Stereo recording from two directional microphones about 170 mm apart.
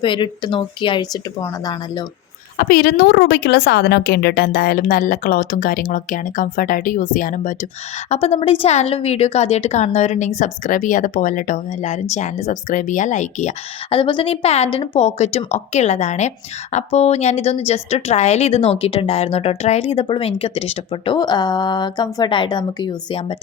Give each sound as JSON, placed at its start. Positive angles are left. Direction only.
{"t": 0.0, "sound": "speech", "side_deg": 30}
{"t": 2.6, "sound": "a woman's voice", "side_deg": 60}
{"t": 8.1, "sound": "a woman's voice", "side_deg": 35}
{"t": 13.9, "sound": "a woman's voice", "side_deg": 30}